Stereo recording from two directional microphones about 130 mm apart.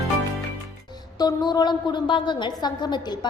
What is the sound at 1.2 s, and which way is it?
A woman's voice, 30° left (ahead or behind).